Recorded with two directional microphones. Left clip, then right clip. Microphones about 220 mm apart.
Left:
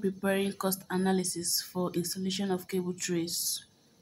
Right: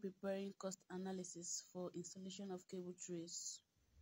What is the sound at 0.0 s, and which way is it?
Speech, 20° right (ahead or behind).